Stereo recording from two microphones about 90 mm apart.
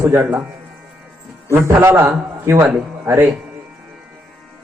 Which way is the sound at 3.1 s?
25° right (ahead or behind).